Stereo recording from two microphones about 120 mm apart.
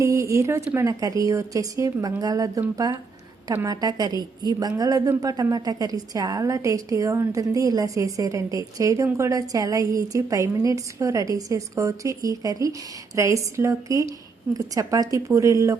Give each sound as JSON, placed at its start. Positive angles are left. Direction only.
{"t": 0.0, "sound": "a woman's voice", "side_deg": -25}